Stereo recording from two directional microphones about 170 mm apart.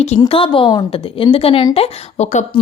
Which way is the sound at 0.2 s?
30° left (ahead or behind).